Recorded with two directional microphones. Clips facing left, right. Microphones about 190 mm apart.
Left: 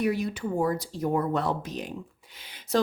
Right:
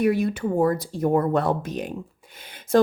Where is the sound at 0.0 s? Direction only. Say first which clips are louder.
Right 6 dB; 55° right (ahead or behind).